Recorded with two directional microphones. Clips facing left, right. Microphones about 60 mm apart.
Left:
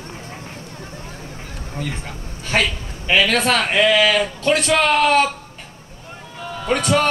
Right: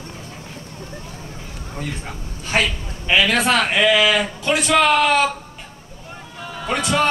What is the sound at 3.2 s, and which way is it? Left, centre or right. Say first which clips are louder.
A man's voice: even; centre.